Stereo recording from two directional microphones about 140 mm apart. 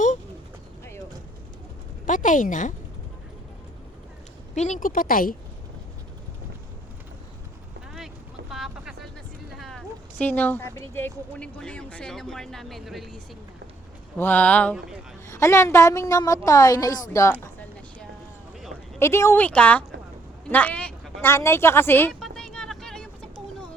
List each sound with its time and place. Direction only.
2.0 s speech: 70° left (ahead or behind)
4.5 s a woman's voice: 60° left (ahead or behind); by 5.4 s 80° left
7.9 s boat: 5° right (ahead or behind)
9.5 s speech: centre (ahead or behind)
14.2 s speech: 10° left (ahead or behind)
15.3 s a woman's voice: 20° left (ahead or behind)
18.9 s a woman's voice: 20° left (ahead or behind)
22.2 s vehicle: 5° left (ahead or behind)